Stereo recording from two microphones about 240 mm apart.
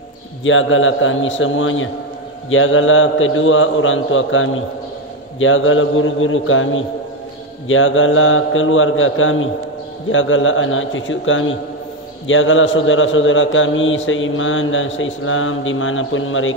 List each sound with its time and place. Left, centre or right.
0.4 s a man's voice: left